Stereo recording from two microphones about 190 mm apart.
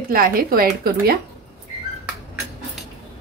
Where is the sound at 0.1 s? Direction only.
50° right (ahead or behind).